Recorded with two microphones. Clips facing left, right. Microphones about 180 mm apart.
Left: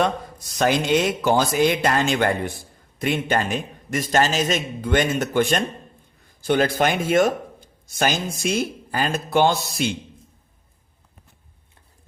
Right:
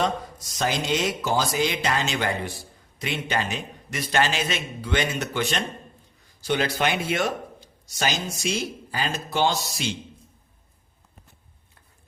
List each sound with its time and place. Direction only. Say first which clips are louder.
0.3 s a man's voice: left 6 dB; 60° left (ahead or behind)